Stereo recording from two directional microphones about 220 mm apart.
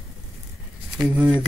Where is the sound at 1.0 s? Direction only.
5° right (ahead or behind).